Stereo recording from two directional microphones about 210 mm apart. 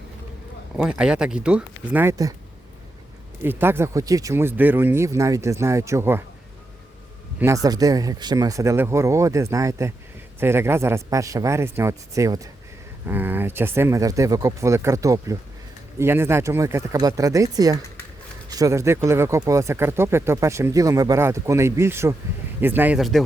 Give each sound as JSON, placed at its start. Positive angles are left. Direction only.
{"t": 0.8, "sound": "speech", "side_deg": -5}
{"t": 3.4, "sound": "speech", "side_deg": -10}
{"t": 7.3, "sound": "speech", "side_deg": -15}